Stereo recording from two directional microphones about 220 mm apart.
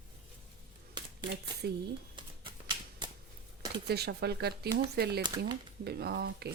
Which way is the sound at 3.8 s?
45° right (ahead or behind).